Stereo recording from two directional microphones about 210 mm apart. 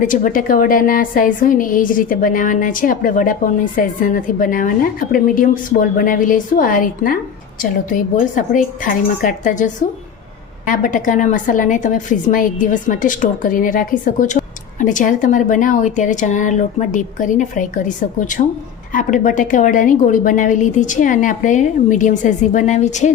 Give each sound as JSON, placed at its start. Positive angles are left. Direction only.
{"t": 0.0, "sound": "a woman's voice", "side_deg": 40}